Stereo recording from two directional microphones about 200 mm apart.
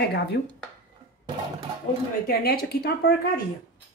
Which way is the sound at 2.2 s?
50° left (ahead or behind).